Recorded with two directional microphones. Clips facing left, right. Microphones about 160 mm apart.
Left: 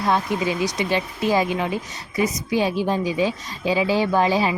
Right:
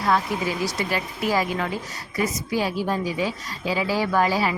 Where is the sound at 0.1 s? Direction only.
20° left (ahead or behind).